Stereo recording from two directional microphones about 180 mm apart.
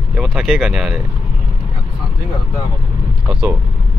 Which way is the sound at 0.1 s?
Centre (ahead or behind).